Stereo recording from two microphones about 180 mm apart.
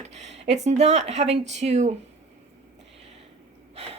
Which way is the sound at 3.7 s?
35° right (ahead or behind).